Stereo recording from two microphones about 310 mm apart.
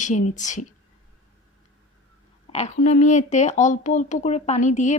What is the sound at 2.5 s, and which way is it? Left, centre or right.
Speech, left.